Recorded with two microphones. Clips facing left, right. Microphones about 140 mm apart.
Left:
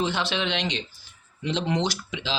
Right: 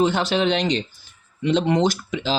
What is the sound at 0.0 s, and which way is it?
Speech, 45° right (ahead or behind).